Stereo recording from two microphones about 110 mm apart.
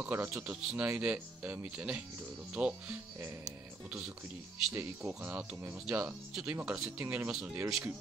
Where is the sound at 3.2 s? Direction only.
20° right (ahead or behind).